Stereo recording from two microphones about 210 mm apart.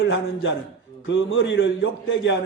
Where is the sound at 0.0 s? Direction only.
60° left (ahead or behind).